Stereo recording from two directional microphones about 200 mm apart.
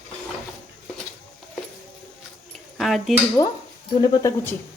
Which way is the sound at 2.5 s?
Centre (ahead or behind).